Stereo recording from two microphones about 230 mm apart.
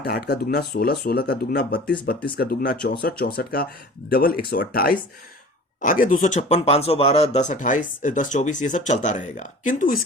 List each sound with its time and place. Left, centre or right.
0.0 s speech: left